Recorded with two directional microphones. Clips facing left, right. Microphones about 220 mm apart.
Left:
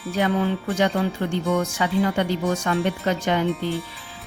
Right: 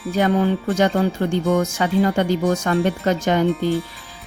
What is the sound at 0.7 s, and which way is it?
A woman's voice, 45° right (ahead or behind).